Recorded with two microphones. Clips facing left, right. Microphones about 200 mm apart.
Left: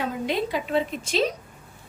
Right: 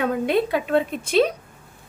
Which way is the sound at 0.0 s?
60° right (ahead or behind).